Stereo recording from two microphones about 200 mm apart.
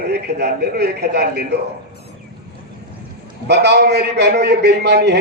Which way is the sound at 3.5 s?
55° right (ahead or behind).